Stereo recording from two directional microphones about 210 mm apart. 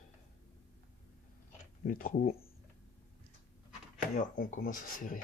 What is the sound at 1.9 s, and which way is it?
Speech, 45° left (ahead or behind).